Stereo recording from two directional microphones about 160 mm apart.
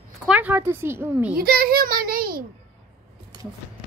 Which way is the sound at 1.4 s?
65° right (ahead or behind).